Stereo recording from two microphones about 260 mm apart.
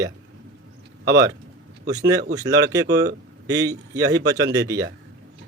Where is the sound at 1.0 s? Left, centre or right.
Centre.